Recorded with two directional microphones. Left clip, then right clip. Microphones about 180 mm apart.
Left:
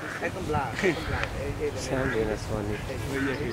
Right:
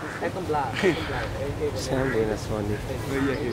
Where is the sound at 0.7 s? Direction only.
Centre (ahead or behind).